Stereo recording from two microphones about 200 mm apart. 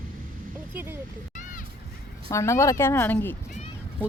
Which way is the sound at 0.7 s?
10° right (ahead or behind).